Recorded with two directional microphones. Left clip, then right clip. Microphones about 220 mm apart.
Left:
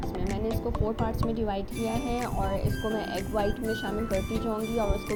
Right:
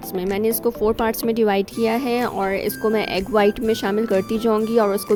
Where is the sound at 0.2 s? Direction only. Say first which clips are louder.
Right 13 dB; 50° right (ahead or behind).